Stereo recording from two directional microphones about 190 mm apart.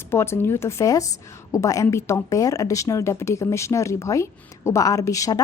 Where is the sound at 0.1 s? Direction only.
10° left (ahead or behind).